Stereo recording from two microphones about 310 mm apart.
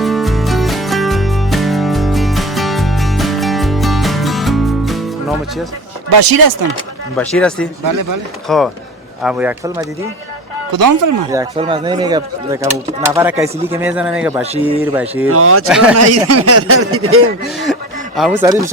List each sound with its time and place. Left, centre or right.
0.0 s music: centre
6.1 s speech: right
7.2 s speech: centre
7.9 s speech: right
8.4 s speech: centre
10.7 s speech: right
11.3 s speech: centre
15.3 s speech: right
15.6 s speech: centre
16.0 s speech: right
17.7 s speech: centre